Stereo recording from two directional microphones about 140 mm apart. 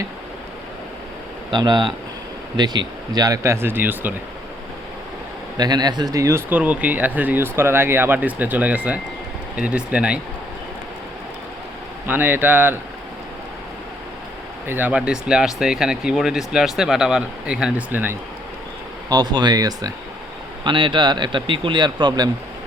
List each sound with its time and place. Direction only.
1.5 s speech: 30° right (ahead or behind); by 4.1 s 15° right (ahead or behind)
5.5 s speech: 30° right (ahead or behind)
6.5 s speech: 10° right (ahead or behind)
12.0 s speech: 15° right (ahead or behind)
14.7 s speech: 15° right (ahead or behind)
19.0 s speech: 30° right (ahead or behind)